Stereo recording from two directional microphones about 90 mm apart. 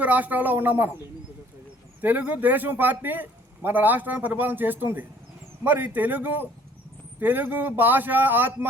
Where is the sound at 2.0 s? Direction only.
20° right (ahead or behind).